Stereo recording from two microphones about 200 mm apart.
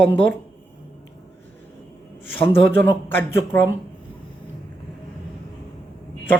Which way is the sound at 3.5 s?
10° left (ahead or behind).